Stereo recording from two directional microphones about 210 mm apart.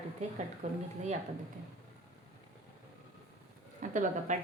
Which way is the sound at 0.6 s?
30° right (ahead or behind).